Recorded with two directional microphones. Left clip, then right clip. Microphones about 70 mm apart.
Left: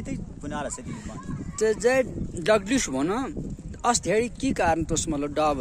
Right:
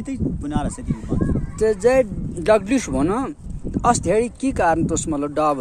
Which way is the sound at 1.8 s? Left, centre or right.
Centre.